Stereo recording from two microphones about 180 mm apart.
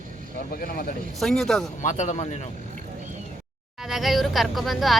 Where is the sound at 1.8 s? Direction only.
40° left (ahead or behind).